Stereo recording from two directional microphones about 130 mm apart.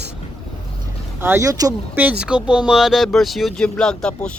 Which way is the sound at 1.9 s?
10° right (ahead or behind).